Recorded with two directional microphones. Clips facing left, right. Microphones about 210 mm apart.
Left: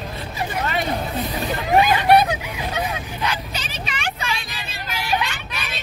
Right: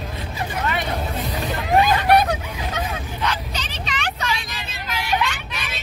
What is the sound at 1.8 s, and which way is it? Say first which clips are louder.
Hubbub: left 1 dB; 15° left (ahead or behind).